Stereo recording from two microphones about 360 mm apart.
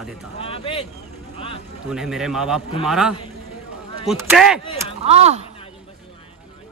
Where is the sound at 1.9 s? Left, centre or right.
Centre.